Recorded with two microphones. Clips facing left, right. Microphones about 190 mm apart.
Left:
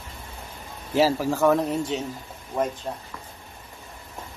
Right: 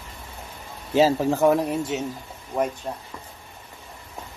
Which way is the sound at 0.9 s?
20° right (ahead or behind).